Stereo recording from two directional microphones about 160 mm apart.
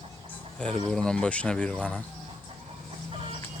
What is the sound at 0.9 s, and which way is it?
Speech, 5° left (ahead or behind).